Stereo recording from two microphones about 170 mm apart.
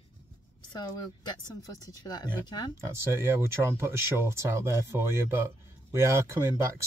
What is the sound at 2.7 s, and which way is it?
Speech, 15° right (ahead or behind).